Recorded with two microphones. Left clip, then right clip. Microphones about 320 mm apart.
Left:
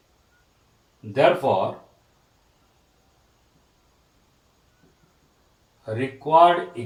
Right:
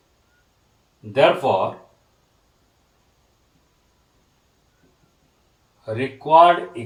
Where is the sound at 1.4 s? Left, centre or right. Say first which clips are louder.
Right 2 dB; centre.